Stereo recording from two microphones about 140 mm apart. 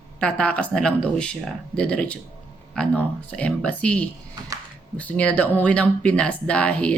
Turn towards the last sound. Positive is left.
turn(degrees=10)  # may be behind; listen again after turning